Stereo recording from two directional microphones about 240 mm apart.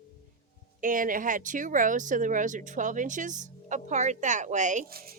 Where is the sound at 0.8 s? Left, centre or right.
Right.